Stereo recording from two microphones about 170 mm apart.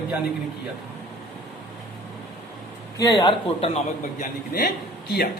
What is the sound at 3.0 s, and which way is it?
Speech, 25° left (ahead or behind).